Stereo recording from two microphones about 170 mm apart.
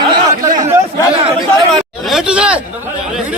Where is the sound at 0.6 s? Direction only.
35° right (ahead or behind).